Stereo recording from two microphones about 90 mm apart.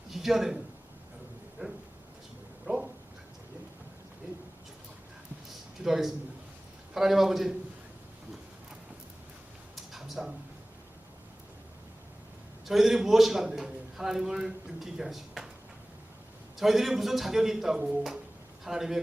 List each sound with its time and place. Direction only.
0.1 s a man's voice: 5° right (ahead or behind)
1.6 s speech: 15° right (ahead or behind)
5.8 s a man's voice: 5° right (ahead or behind)
9.7 s a sound: centre (ahead or behind)
12.6 s a man's voice: 5° right (ahead or behind)
16.6 s a man's voice: centre (ahead or behind)